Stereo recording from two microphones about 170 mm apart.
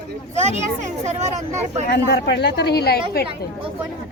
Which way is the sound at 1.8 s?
80° left.